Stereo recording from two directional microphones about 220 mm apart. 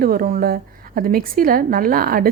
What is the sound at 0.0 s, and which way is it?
A woman's voice, 40° right (ahead or behind).